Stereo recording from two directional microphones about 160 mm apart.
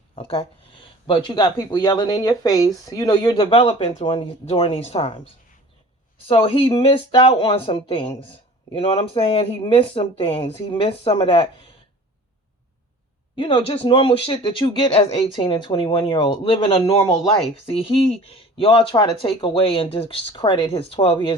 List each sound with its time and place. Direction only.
0.2 s speech: 35° left (ahead or behind)
13.3 s speech: 30° left (ahead or behind)